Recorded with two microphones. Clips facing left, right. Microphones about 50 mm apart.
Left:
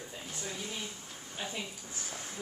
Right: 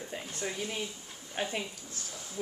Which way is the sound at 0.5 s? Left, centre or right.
Right.